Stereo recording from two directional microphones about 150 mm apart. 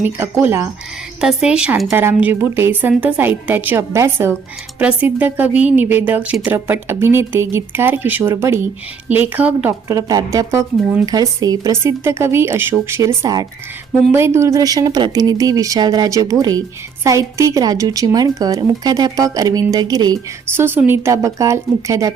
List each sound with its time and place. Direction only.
0.3 s a woman's voice: 15° right (ahead or behind)
1.2 s a woman's voice: 5° right (ahead or behind)
9.9 s speech: 25° right (ahead or behind)
20.6 s speech: 15° right (ahead or behind)